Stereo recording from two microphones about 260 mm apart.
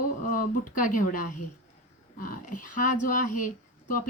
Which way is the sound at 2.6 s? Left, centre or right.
Left.